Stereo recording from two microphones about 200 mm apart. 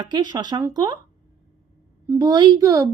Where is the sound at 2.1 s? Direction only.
20° right (ahead or behind).